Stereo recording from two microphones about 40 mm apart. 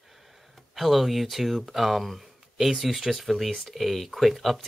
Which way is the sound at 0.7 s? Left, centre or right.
Centre.